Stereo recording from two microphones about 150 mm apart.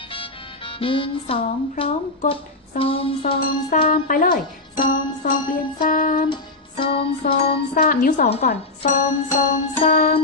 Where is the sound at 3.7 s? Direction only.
65° left (ahead or behind).